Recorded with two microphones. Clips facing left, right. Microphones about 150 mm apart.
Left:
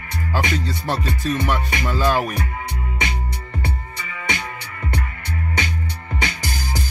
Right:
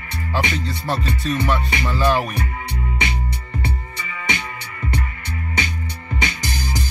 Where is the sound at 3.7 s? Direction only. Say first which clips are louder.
Right 1 dB; 55° left (ahead or behind).